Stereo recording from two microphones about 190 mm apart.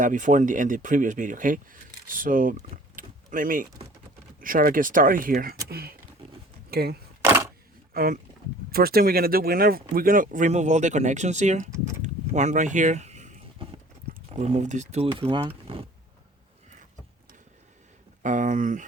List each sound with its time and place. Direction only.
0.0 s speech: 45° right (ahead or behind)
7.9 s speech: 50° right (ahead or behind)
12.0 s a sound: 40° right (ahead or behind)
14.1 s speech: 35° right (ahead or behind)
18.2 s speech: 40° right (ahead or behind)